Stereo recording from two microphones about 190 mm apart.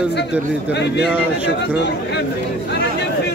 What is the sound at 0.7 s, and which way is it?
A man's voice, 65° left (ahead or behind).